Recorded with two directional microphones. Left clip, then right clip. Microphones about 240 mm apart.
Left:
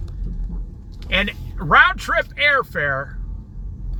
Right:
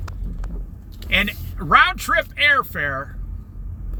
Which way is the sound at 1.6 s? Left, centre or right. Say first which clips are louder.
Left 1 dB; centre.